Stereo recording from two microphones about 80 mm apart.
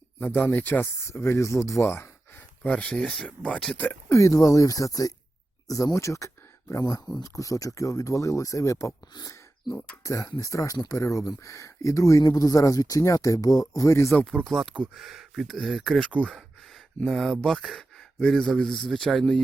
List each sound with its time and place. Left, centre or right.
0.2 s speech: left
1.0 s speech: left
2.6 s speech: centre
4.1 s speech: left
9.1 s speech: left
9.7 s speech: left
10.0 s speech: left
14.3 s speech: centre
16.1 s a sound: centre
17.1 s speech: centre